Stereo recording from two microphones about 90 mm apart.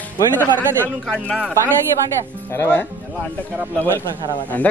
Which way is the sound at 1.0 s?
10° left (ahead or behind).